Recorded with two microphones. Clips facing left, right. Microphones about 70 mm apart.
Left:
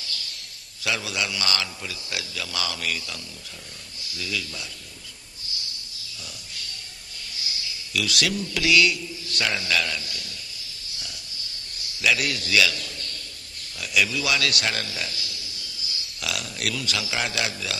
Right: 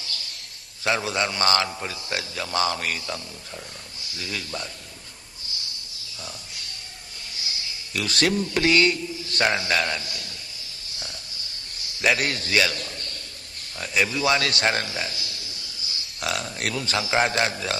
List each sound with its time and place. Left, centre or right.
0.8 s a man's voice: right
4.2 s a man's voice: right
7.9 s a man's voice: right
12.0 s a man's voice: right
16.3 s a man's voice: right